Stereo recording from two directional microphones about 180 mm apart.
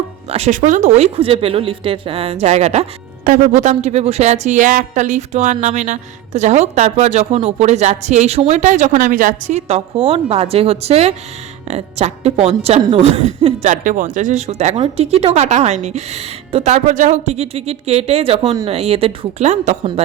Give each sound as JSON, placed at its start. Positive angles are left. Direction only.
{"t": 0.3, "sound": "speech", "side_deg": -35}